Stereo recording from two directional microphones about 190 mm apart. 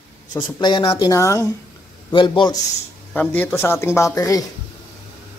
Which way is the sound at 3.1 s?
10° left (ahead or behind).